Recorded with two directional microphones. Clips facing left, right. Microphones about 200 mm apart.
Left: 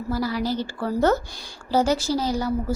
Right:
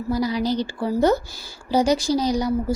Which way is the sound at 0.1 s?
15° right (ahead or behind).